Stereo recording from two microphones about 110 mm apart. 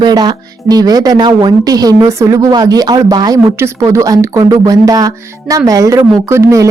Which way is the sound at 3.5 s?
25° right (ahead or behind).